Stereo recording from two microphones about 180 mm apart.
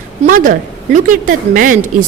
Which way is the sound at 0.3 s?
50° right (ahead or behind).